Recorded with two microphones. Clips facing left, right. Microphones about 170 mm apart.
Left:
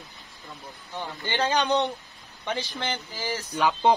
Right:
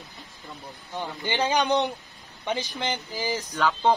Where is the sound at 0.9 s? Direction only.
15° right (ahead or behind).